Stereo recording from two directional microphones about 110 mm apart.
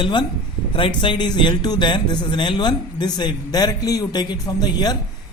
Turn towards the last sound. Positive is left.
turn(degrees=35)  # may be behind; listen again after turning